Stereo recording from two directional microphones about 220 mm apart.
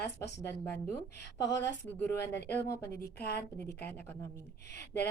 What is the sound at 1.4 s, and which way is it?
Speech, 55° left (ahead or behind).